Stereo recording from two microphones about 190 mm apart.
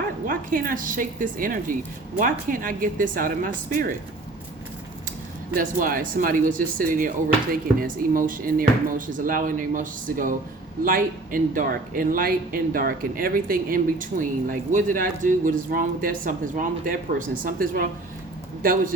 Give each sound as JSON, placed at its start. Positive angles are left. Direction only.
{"t": 0.3, "sound": "speech", "side_deg": -45}
{"t": 5.5, "sound": "speech", "side_deg": -45}